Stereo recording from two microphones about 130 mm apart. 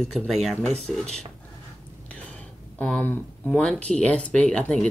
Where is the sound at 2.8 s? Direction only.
15° left (ahead or behind).